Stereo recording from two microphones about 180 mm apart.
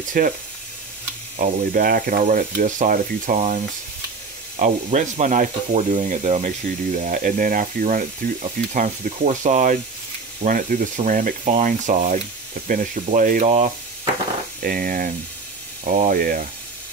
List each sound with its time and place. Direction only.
0.2 s speech: 50° right (ahead or behind)
1.4 s speech: 50° right (ahead or behind)
14.6 s speech: 55° right (ahead or behind)